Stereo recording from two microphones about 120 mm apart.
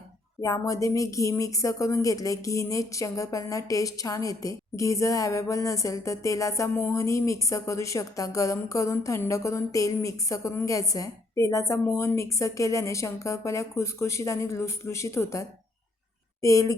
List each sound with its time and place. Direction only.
0.4 s speech: 30° left (ahead or behind)